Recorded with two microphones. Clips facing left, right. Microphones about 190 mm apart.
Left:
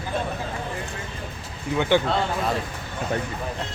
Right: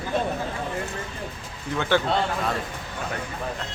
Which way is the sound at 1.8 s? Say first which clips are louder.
Left 2 dB; 15° left (ahead or behind).